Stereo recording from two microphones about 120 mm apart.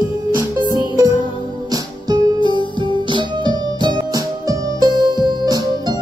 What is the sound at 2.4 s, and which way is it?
Music, 40° left (ahead or behind).